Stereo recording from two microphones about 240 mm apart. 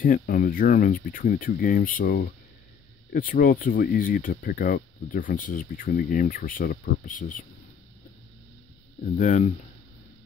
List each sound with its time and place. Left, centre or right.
0.0 s speech: left
9.1 s speech: left